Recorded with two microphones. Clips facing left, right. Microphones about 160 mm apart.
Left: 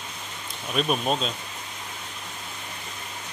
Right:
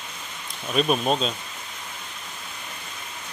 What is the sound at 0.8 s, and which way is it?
Speech, centre (ahead or behind).